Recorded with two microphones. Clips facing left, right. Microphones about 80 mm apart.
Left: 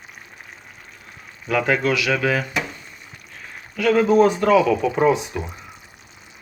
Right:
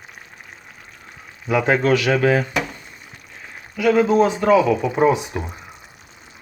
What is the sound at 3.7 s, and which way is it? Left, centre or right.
Speech, centre.